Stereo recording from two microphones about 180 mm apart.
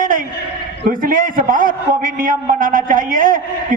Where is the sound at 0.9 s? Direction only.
50° right (ahead or behind).